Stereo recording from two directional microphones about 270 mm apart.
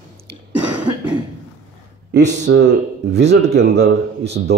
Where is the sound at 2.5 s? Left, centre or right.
Right.